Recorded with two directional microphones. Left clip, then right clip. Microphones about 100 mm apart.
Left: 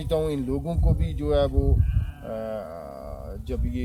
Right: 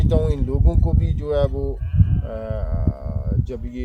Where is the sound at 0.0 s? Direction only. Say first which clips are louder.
Right 2 dB; 45° right (ahead or behind).